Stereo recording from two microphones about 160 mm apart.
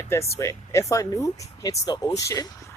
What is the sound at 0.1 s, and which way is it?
Speech, 20° left (ahead or behind).